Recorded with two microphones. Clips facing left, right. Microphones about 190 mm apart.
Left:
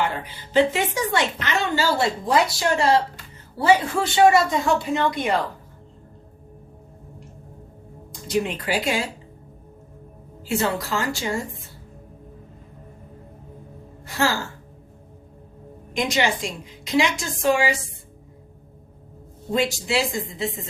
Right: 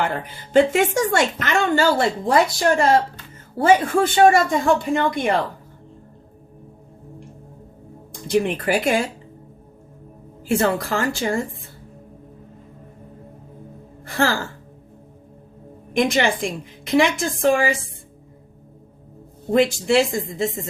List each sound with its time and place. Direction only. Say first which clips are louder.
0.0 s a woman's voice: right 2 dB; 50° right (ahead or behind)
8.3 s a woman's voice: right 4 dB; 55° right (ahead or behind)
10.5 s a woman's voice: right 4 dB; 50° right (ahead or behind)
14.1 s speech: right 2 dB; 55° right (ahead or behind)
15.9 s a woman's voice: right 4 dB; 50° right (ahead or behind)
19.5 s a woman's voice: right 6 dB; 55° right (ahead or behind)